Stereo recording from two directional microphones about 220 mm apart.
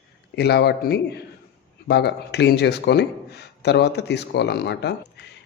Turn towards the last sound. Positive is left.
turn(degrees=50)  # may be behind; listen again after turning